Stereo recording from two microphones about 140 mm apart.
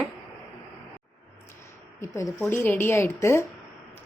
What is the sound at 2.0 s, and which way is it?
A woman's voice, 20° left (ahead or behind).